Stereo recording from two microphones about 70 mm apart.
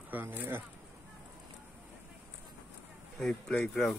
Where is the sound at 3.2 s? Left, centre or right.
Centre.